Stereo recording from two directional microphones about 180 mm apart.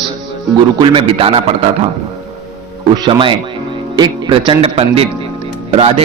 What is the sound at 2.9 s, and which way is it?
A man's voice, 25° right (ahead or behind).